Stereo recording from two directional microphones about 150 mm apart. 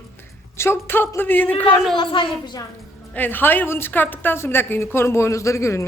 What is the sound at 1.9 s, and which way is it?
Speech, 35° left (ahead or behind).